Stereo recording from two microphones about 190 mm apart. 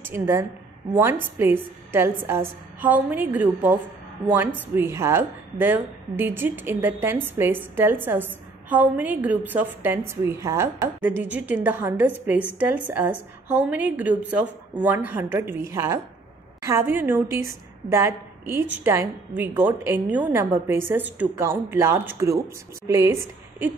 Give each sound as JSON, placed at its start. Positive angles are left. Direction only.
{"t": 0.0, "sound": "a woman's voice", "side_deg": -10}